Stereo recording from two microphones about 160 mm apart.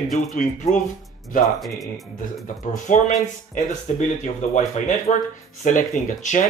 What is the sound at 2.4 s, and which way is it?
Speech, 50° left (ahead or behind).